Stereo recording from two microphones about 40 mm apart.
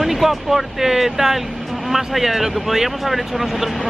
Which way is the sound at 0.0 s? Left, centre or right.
Centre.